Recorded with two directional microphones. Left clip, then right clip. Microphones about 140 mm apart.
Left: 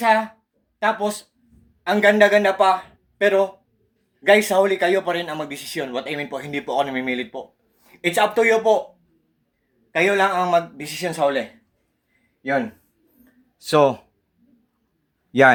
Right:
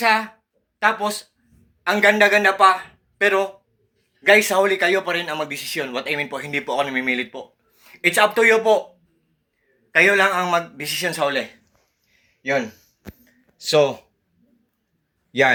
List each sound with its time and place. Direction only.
0.0 s a man's voice: 30° left (ahead or behind)
9.9 s a man's voice: 25° left (ahead or behind)
12.4 s speech: 50° left (ahead or behind)
13.6 s speech: 65° left (ahead or behind)
15.3 s a man's voice: 65° left (ahead or behind)